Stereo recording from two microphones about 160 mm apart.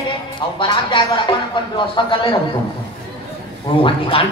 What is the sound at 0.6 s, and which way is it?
A woman's voice, 30° left (ahead or behind).